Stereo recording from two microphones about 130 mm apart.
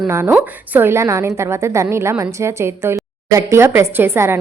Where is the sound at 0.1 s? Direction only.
15° right (ahead or behind).